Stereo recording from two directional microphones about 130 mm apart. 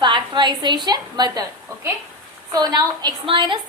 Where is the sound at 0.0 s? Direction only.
35° right (ahead or behind).